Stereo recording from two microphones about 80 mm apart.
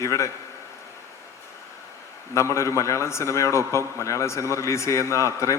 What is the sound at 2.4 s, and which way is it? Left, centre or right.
A man's voice, left.